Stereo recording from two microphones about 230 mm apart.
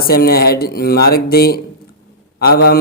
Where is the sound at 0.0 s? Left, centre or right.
Left.